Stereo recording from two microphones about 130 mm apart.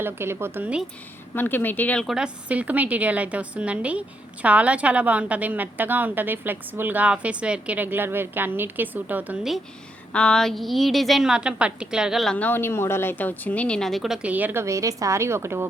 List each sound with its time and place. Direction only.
0.0 s a woman's voice: 20° right (ahead or behind)
1.4 s speech: 15° left (ahead or behind)
2.0 s a woman's voice: 5° right (ahead or behind)
10.1 s a woman's voice: 10° left (ahead or behind); by 15.6 s 20° right (ahead or behind)